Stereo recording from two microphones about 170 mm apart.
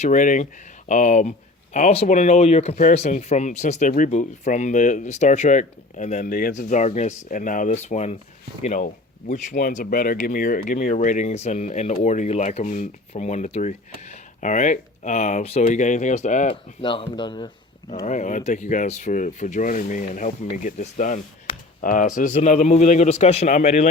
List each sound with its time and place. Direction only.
0.0 s speech: 50° left (ahead or behind)
16.5 s speech: 30° left (ahead or behind)
18.0 s speech: 45° left (ahead or behind)